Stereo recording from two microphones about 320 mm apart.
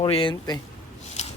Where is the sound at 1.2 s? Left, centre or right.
Left.